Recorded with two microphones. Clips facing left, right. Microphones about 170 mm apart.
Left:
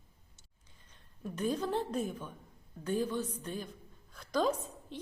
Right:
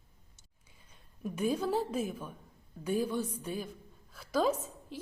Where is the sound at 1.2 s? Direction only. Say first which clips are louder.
Right 2 dB; 10° right (ahead or behind).